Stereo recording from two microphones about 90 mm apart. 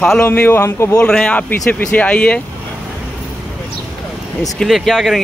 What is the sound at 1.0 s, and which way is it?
Speech, 10° left (ahead or behind).